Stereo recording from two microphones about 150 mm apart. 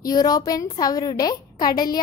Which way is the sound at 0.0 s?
25° left (ahead or behind).